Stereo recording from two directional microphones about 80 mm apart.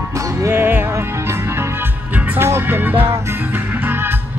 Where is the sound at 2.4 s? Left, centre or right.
Right.